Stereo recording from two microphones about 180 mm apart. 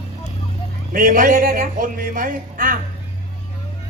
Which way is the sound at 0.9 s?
50° right (ahead or behind).